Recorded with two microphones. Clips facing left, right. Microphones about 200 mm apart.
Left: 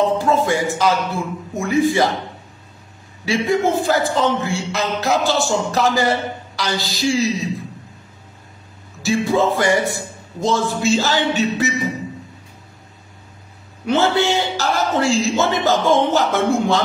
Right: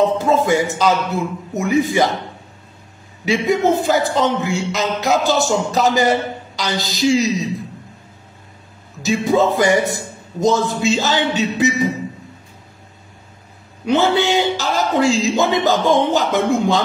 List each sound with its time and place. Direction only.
0.2 s a man's voice: 20° right (ahead or behind)
3.3 s a man's voice: 20° right (ahead or behind)
9.0 s a man's voice: 20° right (ahead or behind)
13.8 s a man's voice: 15° right (ahead or behind)